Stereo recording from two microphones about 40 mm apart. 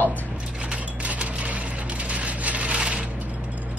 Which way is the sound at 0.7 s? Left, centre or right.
Right.